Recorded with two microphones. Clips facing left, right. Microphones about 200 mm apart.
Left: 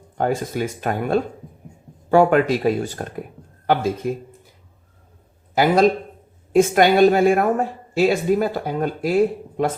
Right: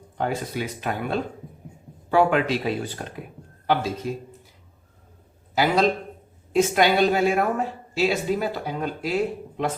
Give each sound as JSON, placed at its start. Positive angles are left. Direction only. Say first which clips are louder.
{"t": 0.2, "sound": "a woman's voice", "louder": "left 5 dB", "side_deg": 45}
{"t": 5.5, "sound": "a woman's voice", "louder": "left 5 dB", "side_deg": 50}